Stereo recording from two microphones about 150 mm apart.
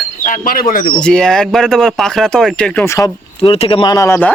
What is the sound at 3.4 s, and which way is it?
Speech, 40° left (ahead or behind).